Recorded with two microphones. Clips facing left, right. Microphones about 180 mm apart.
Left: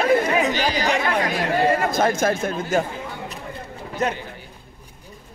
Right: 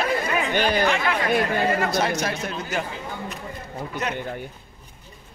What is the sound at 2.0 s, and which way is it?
Speech, 50° left (ahead or behind).